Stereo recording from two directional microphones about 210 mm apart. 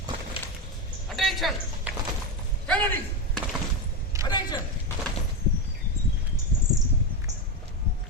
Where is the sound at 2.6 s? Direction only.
10° left (ahead or behind).